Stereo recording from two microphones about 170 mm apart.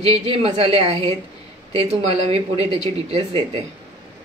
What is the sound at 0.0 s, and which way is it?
Speech, 35° right (ahead or behind).